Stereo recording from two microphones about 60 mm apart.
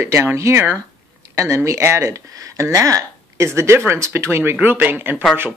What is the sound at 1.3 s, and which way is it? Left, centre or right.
Speech, right.